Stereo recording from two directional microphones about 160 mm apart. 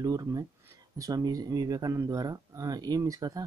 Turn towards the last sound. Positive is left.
turn(degrees=-25)  # may be behind; listen again after turning